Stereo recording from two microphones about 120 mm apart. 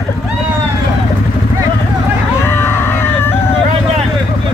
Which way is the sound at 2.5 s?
20° left (ahead or behind).